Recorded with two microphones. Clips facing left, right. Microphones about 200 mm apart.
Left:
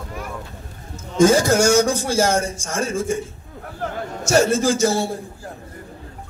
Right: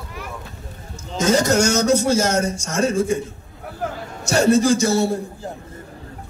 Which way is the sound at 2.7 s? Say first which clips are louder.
Right 4 dB; 50° left (ahead or behind).